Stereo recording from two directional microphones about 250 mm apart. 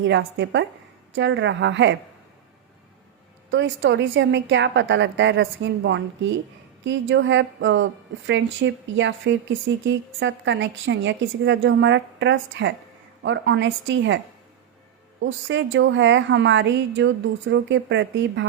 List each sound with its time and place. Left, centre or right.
0.0 s speech: right
3.5 s speech: right
15.2 s speech: right